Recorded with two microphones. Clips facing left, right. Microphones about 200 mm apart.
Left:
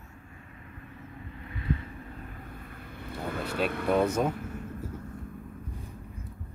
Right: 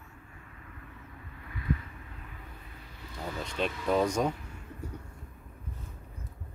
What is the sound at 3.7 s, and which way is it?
Speech, 60° left (ahead or behind).